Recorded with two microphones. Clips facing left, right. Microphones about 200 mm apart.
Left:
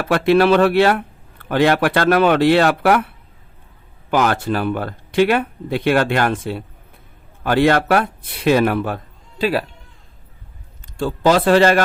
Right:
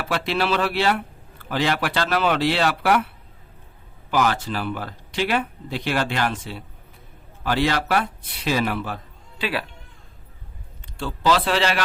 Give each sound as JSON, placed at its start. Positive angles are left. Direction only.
{"t": 0.0, "sound": "speech", "side_deg": 55}
{"t": 4.1, "sound": "speech", "side_deg": 55}
{"t": 9.4, "sound": "speech", "side_deg": 40}
{"t": 10.9, "sound": "speech", "side_deg": 45}